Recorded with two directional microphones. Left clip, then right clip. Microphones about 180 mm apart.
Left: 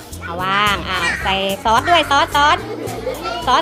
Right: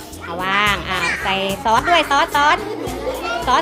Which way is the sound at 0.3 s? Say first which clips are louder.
Left 1 dB; 5° left (ahead or behind).